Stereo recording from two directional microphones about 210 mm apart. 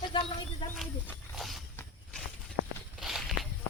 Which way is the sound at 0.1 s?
20° left (ahead or behind).